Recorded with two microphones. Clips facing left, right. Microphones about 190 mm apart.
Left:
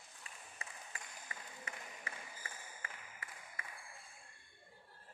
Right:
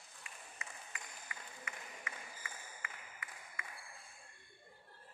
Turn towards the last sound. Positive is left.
turn(degrees=35)  # may be behind; listen again after turning